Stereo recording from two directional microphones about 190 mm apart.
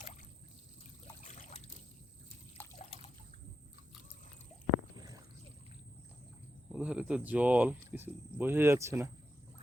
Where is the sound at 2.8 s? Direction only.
30° left (ahead or behind).